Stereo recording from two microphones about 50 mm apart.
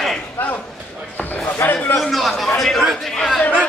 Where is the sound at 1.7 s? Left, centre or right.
Left.